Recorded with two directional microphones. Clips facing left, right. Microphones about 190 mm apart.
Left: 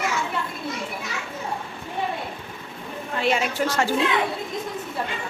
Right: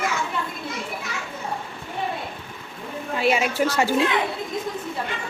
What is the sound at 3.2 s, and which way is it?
Speech, 5° right (ahead or behind).